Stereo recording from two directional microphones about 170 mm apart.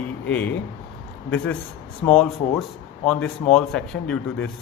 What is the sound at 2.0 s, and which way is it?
Speech, 15° left (ahead or behind).